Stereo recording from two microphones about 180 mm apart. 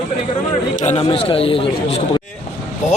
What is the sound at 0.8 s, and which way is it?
Speech, 35° left (ahead or behind).